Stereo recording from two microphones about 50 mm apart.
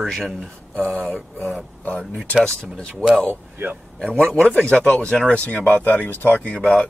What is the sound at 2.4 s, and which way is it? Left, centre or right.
Speech, centre.